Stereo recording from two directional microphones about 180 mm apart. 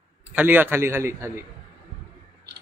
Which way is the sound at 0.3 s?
10° right (ahead or behind).